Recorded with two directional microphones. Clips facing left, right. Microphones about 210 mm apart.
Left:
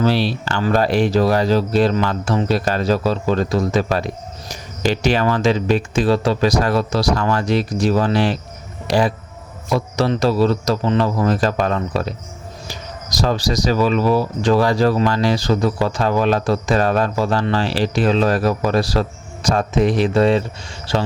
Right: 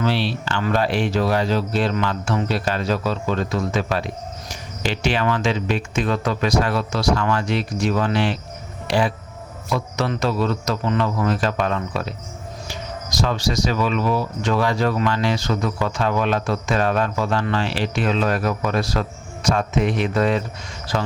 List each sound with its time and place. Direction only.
0.0 s speech: 40° left (ahead or behind)